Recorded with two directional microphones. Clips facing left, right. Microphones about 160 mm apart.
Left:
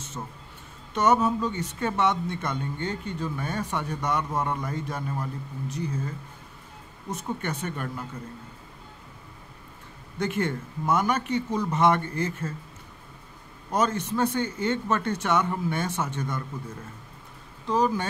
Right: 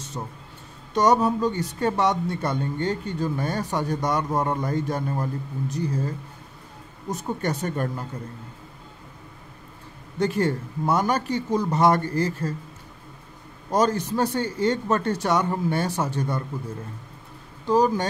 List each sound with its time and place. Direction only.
0.2 s speech: 25° right (ahead or behind)
0.9 s speech: 35° right (ahead or behind)
7.4 s speech: 40° right (ahead or behind)
10.2 s speech: 35° right (ahead or behind)
13.7 s speech: 35° right (ahead or behind)
17.6 s speech: 35° right (ahead or behind)